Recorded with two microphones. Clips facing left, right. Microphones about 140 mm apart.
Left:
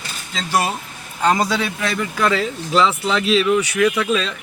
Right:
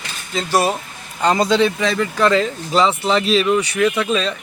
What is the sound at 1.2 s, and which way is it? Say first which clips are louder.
Speech: right 3 dB; 5° left (ahead or behind).